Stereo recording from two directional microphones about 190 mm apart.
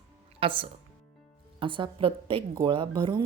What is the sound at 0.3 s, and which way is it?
Speech, 30° right (ahead or behind).